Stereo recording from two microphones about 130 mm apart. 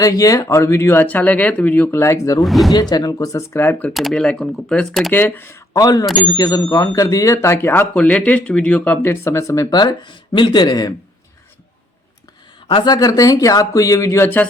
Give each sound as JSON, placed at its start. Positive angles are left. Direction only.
{"t": 0.0, "sound": "speech", "side_deg": 25}
{"t": 2.4, "sound": "speech", "side_deg": 0}
{"t": 2.9, "sound": "speech", "side_deg": 30}
{"t": 3.9, "sound": "speech", "side_deg": 5}
{"t": 5.1, "sound": "speech", "side_deg": 15}
{"t": 12.6, "sound": "speech", "side_deg": 35}